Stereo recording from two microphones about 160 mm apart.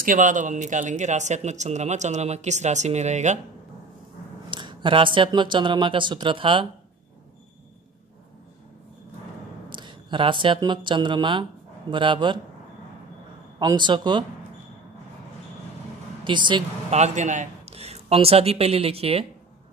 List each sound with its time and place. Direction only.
0.0 s speech: 55° right (ahead or behind)
4.5 s speech: 30° right (ahead or behind)
9.7 s speech: 30° right (ahead or behind)
13.6 s speech: 30° right (ahead or behind)
16.3 s speech: 30° right (ahead or behind)
16.9 s a man's voice: 45° right (ahead or behind)